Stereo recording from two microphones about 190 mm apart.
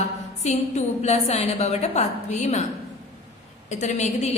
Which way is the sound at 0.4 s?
35° left (ahead or behind).